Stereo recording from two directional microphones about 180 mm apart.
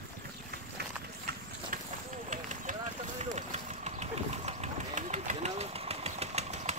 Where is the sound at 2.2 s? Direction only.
45° right (ahead or behind).